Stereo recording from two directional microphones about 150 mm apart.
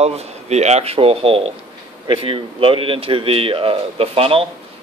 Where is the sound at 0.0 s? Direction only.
45° right (ahead or behind).